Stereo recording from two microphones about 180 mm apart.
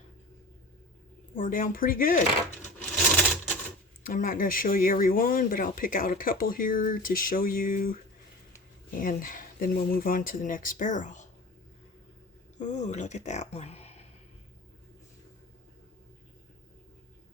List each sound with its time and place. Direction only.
1.4 s speech: 50° left (ahead or behind)
4.0 s speech: 50° left (ahead or behind)
9.0 s speech: 50° left (ahead or behind)
12.5 s speech: 40° left (ahead or behind)